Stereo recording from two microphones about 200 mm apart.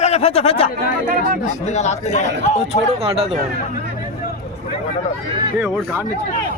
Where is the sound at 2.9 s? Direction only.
30° right (ahead or behind).